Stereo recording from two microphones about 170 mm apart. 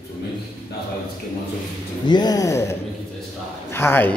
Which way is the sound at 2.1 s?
25° left (ahead or behind).